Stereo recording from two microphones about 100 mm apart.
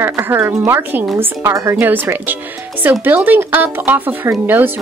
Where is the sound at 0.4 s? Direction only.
10° right (ahead or behind).